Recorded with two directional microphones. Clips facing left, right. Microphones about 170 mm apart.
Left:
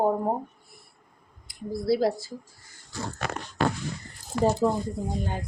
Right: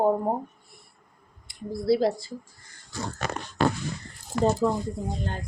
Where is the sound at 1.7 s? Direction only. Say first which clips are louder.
Right 1 dB; centre (ahead or behind).